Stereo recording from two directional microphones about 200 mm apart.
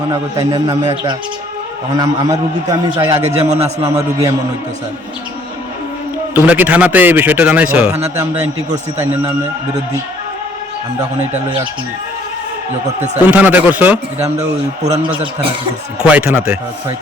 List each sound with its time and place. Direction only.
0.1 s a man's voice: 15° right (ahead or behind)
3.2 s a man's voice: 35° right (ahead or behind)
3.8 s a man's voice: 15° right (ahead or behind)
6.3 s a man's voice: 10° right (ahead or behind)
13.2 s a man's voice: 10° right (ahead or behind)
14.8 s a man's voice: 35° right (ahead or behind)
16.0 s a man's voice: 10° right (ahead or behind)